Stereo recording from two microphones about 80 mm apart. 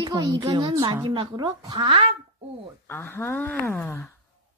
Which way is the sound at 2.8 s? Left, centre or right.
Left.